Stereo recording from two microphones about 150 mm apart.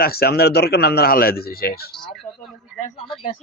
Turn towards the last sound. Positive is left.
turn(degrees=0)  # may be behind; listen again after turning